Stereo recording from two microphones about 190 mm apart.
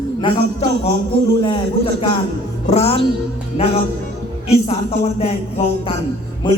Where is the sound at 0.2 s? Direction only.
30° left (ahead or behind).